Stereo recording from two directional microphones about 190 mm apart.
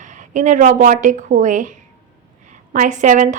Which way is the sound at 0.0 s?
40° right (ahead or behind).